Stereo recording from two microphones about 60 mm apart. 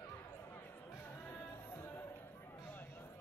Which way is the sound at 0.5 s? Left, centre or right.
Left.